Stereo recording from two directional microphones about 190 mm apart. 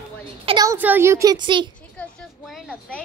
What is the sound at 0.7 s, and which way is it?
A woman's voice, 10° right (ahead or behind).